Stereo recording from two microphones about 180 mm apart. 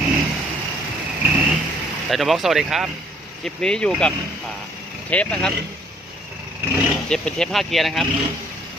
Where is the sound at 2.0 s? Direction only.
Centre (ahead or behind).